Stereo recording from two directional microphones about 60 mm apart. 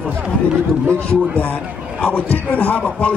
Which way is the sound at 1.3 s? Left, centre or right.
Left.